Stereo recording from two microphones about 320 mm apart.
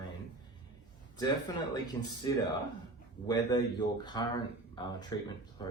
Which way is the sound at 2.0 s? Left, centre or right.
Centre.